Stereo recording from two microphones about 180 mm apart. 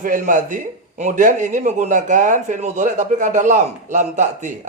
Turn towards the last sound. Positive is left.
turn(degrees=-40)  # may be behind; listen again after turning